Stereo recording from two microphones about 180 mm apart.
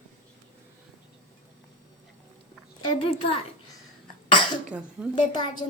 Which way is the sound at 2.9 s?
30° left (ahead or behind).